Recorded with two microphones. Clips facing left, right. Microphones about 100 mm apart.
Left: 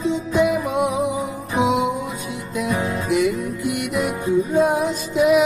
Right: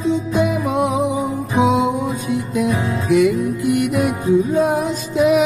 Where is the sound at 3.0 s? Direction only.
50° right (ahead or behind).